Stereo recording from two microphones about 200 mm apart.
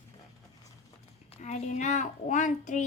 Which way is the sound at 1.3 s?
35° left (ahead or behind).